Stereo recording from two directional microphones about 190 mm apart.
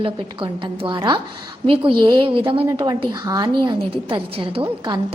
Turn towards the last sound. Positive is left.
turn(degrees=-25)  # may be behind; listen again after turning